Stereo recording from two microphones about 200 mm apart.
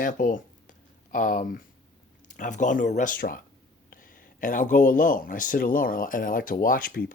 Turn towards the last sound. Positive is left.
turn(degrees=45)  # may be behind; listen again after turning